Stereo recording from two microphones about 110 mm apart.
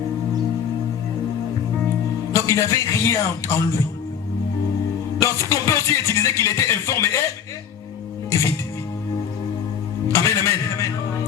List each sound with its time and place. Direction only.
2.3 s speech: 25° left (ahead or behind)
5.2 s speech: 30° left (ahead or behind)
10.1 s a man's voice: 25° left (ahead or behind)